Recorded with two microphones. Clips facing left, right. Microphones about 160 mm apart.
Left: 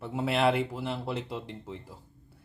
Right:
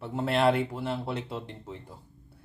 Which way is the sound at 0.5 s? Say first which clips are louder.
Right 1 dB; 50° right (ahead or behind).